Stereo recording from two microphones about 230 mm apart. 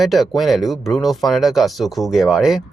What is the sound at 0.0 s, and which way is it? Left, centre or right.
Speech, centre.